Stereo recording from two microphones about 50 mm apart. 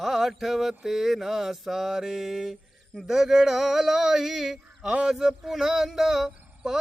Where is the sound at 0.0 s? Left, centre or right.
Centre.